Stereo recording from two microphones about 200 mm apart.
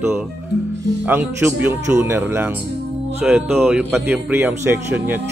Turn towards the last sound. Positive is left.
turn(degrees=-10)  # may be behind; listen again after turning